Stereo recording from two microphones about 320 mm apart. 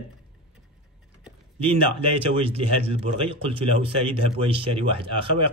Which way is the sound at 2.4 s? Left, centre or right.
Centre.